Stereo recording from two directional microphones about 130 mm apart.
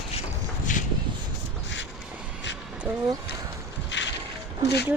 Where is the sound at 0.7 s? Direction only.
85° left.